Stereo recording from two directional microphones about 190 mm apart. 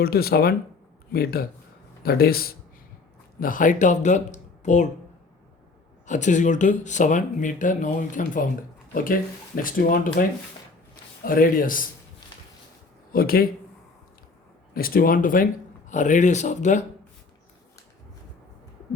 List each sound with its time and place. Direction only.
0.0 s speech: 55° left (ahead or behind)
6.1 s speech: 40° left (ahead or behind)
13.1 s speech: 50° left (ahead or behind)
14.7 s speech: 50° left (ahead or behind)